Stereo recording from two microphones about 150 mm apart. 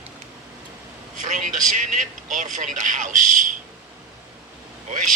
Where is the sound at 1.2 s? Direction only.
60° right (ahead or behind).